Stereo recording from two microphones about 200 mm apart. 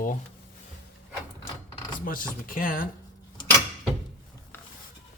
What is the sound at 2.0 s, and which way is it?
Speech, 45° left (ahead or behind).